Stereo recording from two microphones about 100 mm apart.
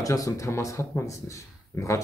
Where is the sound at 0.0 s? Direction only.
35° left (ahead or behind).